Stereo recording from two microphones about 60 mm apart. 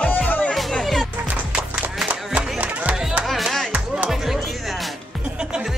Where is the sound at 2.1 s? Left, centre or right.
Right.